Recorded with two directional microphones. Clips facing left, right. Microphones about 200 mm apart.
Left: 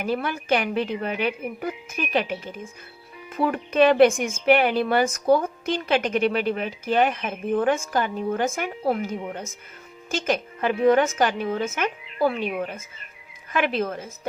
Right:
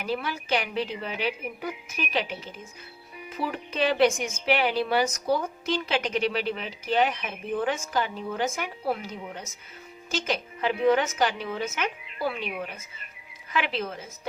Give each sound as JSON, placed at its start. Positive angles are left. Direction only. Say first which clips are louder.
{"t": 0.0, "sound": "a woman's voice", "louder": "left 4 dB", "side_deg": 50}
{"t": 3.3, "sound": "a woman's voice", "louder": "left 9 dB", "side_deg": 55}